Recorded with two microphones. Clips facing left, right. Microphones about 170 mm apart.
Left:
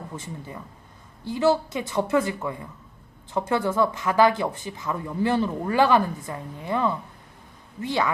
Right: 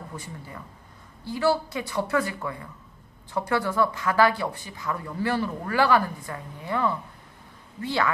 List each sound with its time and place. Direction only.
0.2 s speech: 20° left (ahead or behind)